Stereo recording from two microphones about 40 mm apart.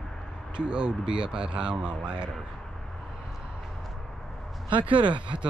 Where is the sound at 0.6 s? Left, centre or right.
Right.